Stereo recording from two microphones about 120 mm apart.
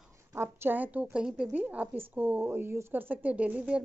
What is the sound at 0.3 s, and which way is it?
A woman's voice, 20° right (ahead or behind).